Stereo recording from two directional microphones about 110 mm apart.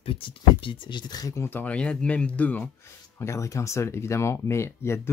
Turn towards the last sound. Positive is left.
turn(degrees=25)  # may be behind; listen again after turning